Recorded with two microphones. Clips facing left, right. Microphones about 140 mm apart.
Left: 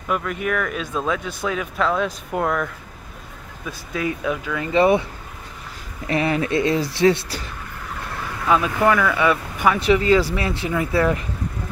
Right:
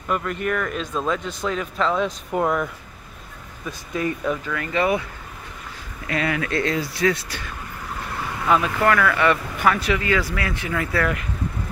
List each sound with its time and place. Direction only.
0.1 s speech: 5° left (ahead or behind)
4.6 s speech: 30° left (ahead or behind)
6.0 s speech: 25° left (ahead or behind)
8.7 s speech: 15° left (ahead or behind)
9.8 s speech: 30° left (ahead or behind)